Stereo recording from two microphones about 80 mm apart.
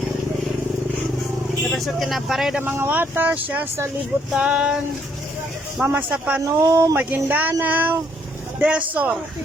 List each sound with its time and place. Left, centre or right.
1.6 s speech: centre
2.6 s speech: right
4.4 s a sound: centre
5.8 s speech: right
6.4 s speech: right
6.9 s speech: right